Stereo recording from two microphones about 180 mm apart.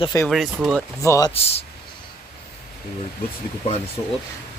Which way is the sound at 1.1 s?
20° left (ahead or behind).